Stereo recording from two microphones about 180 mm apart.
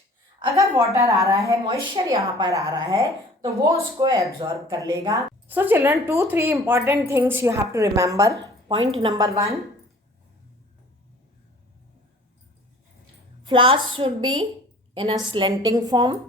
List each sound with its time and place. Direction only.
0.3 s a woman's voice: 15° right (ahead or behind)
13.4 s a woman's voice: 25° right (ahead or behind)